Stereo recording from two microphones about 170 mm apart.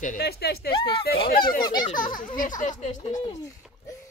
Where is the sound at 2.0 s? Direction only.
55° left (ahead or behind).